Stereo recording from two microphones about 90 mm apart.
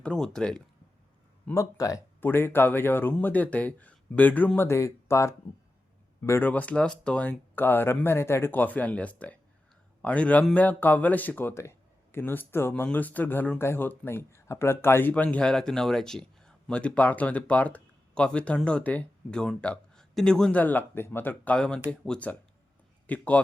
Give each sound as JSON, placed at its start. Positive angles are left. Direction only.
{"t": 0.0, "sound": "speech", "side_deg": 10}
{"t": 1.5, "sound": "speech", "side_deg": 40}
{"t": 2.2, "sound": "speech", "side_deg": 25}
{"t": 6.5, "sound": "speech", "side_deg": 15}
{"t": 15.1, "sound": "speech", "side_deg": 15}
{"t": 20.6, "sound": "speech", "side_deg": 20}